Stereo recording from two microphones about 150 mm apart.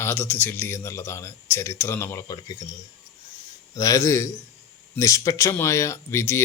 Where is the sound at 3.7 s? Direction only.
20° left (ahead or behind).